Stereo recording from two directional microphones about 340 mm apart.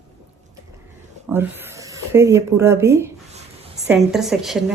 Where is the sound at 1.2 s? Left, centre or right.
Centre.